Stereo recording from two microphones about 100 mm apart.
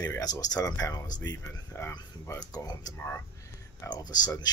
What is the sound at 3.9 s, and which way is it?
Speech, 40° left (ahead or behind).